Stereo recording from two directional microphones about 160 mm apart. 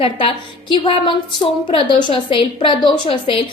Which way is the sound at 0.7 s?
35° left (ahead or behind).